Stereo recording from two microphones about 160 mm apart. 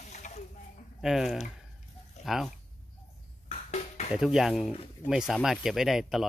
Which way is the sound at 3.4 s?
45° left (ahead or behind).